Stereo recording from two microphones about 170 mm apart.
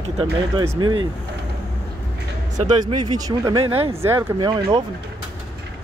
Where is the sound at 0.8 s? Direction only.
25° right (ahead or behind).